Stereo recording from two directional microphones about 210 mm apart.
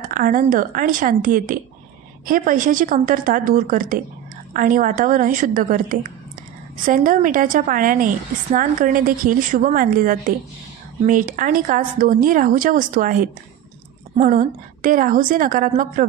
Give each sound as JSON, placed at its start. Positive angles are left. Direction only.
{"t": 0.1, "sound": "speech", "side_deg": -40}